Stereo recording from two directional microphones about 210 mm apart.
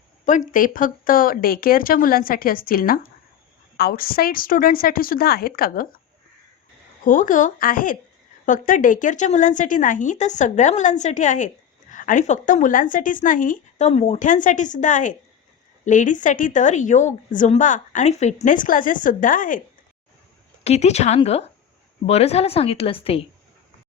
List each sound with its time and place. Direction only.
0.3 s speech: 40° left (ahead or behind)
7.0 s speech: 40° left (ahead or behind)
20.7 s a woman's voice: 30° left (ahead or behind)